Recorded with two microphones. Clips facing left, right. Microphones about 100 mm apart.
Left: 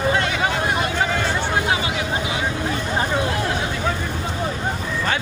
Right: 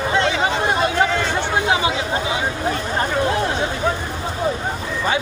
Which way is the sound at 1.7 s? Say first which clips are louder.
Right 3 dB; 25° right (ahead or behind).